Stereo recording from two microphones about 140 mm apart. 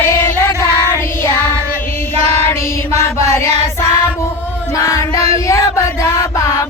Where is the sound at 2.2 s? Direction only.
20° left (ahead or behind).